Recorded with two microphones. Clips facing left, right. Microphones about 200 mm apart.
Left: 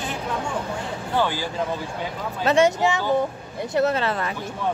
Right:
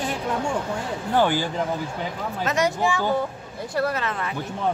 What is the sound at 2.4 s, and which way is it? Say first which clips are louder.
Speech: left 5 dB; 25° left (ahead or behind).